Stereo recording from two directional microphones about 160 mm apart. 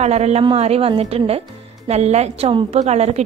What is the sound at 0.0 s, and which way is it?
A woman's voice, 45° right (ahead or behind).